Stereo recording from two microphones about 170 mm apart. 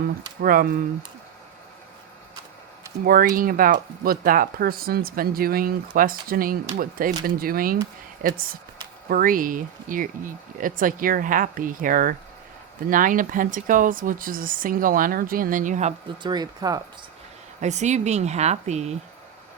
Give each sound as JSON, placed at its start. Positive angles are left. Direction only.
{"t": 0.4, "sound": "speech", "side_deg": -60}
{"t": 3.0, "sound": "speech", "side_deg": -60}
{"t": 16.2, "sound": "speech", "side_deg": -25}
{"t": 17.6, "sound": "speech", "side_deg": -45}